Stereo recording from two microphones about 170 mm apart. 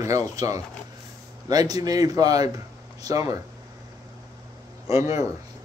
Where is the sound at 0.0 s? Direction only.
20° right (ahead or behind).